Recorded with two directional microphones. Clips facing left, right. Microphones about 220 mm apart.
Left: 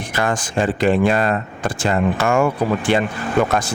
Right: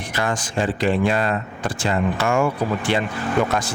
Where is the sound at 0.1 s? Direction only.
50° left (ahead or behind).